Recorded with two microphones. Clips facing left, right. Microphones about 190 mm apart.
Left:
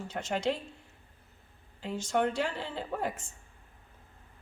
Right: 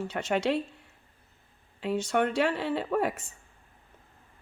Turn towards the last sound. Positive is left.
turn(degrees=-70)  # may be behind; listen again after turning